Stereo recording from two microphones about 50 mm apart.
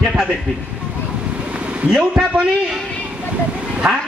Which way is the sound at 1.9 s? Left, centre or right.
Centre.